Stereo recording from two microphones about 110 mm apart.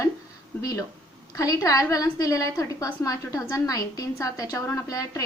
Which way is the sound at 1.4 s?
30° left (ahead or behind).